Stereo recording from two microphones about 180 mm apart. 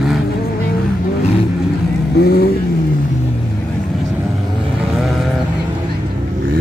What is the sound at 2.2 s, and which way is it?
Vehicle, 65° left (ahead or behind).